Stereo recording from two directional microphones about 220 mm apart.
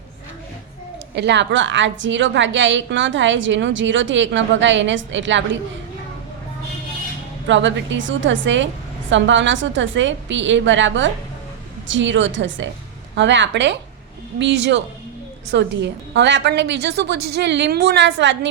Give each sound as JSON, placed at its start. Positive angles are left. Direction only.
{"t": 1.1, "sound": "a woman's voice", "side_deg": -50}
{"t": 7.4, "sound": "a woman's voice", "side_deg": -55}